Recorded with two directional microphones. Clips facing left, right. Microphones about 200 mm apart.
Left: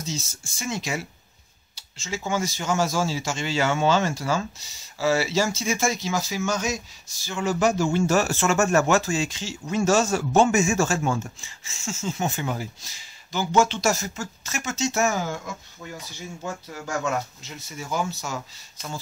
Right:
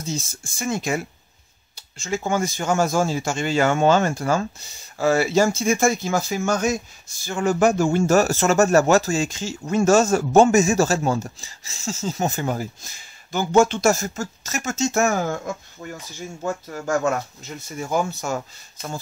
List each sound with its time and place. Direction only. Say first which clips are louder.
0.0 s speech: right 4 dB; 55° right (ahead or behind)
16.7 s speech: right 5 dB; 45° right (ahead or behind)